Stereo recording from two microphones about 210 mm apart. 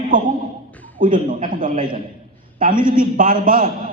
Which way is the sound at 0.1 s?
40° right (ahead or behind).